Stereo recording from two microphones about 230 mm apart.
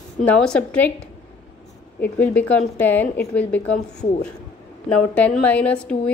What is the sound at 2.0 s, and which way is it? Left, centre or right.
A woman's voice, centre.